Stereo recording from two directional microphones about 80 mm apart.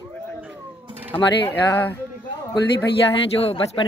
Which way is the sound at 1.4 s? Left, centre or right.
Left.